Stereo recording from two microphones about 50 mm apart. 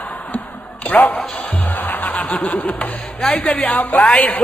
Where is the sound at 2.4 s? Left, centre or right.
Left.